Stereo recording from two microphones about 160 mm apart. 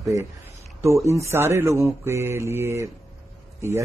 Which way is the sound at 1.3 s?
15° right (ahead or behind).